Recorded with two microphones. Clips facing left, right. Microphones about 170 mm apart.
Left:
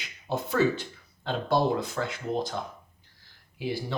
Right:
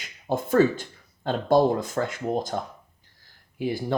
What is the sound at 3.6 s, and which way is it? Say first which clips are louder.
Speech: right 5 dB; 50° right (ahead or behind).